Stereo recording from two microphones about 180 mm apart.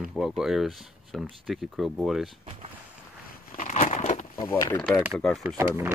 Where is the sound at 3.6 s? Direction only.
40° left (ahead or behind).